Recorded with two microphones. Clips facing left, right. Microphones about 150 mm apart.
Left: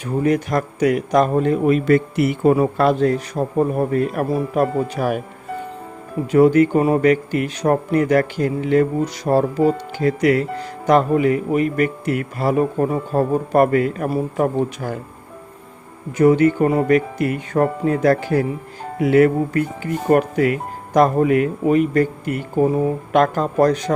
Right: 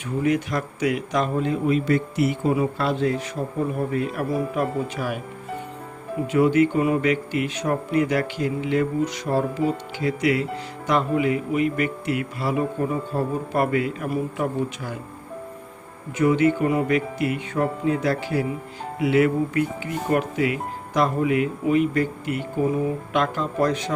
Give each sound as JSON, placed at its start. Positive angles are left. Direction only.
{"t": 0.0, "sound": "speech", "side_deg": 40}
{"t": 2.6, "sound": "speech", "side_deg": 50}
{"t": 6.3, "sound": "speech", "side_deg": 40}
{"t": 16.1, "sound": "speech", "side_deg": 40}